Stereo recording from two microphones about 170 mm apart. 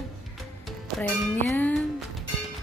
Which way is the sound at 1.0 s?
10° left (ahead or behind).